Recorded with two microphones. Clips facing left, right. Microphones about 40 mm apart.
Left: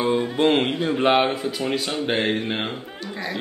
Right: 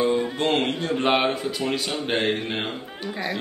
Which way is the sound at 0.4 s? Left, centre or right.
Centre.